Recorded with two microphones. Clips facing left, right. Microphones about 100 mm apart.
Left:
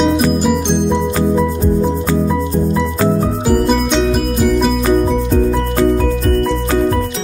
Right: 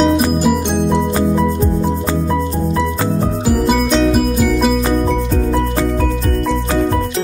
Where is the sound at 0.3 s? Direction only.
Centre (ahead or behind).